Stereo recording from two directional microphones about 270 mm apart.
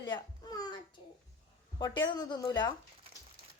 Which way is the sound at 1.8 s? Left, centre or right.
Centre.